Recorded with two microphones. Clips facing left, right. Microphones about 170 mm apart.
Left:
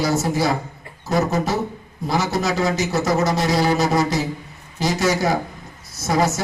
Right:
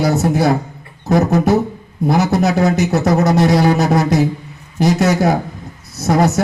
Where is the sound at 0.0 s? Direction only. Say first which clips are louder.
Right 5 dB; 60° right (ahead or behind).